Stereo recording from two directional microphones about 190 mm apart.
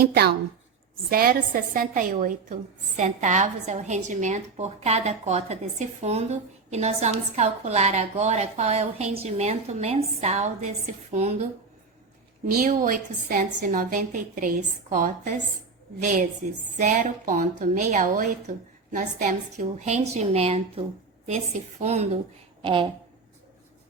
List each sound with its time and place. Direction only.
0.0 s a woman's voice: 55° right (ahead or behind); by 11.4 s 35° right (ahead or behind)
12.5 s a woman's voice: 45° right (ahead or behind); by 22.9 s 25° right (ahead or behind)